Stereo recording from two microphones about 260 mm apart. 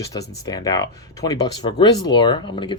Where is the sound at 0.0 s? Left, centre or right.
Centre.